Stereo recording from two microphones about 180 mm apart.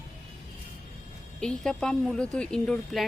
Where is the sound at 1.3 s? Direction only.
5° left (ahead or behind).